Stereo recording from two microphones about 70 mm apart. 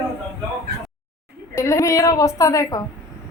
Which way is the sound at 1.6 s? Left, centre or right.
Left.